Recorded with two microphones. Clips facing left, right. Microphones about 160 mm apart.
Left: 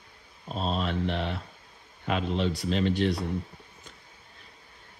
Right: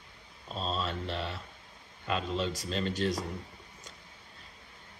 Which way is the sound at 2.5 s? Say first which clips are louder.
Left 7 dB; 40° right (ahead or behind).